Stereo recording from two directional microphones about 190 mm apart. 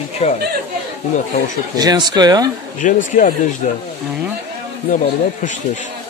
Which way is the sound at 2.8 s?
45° left (ahead or behind).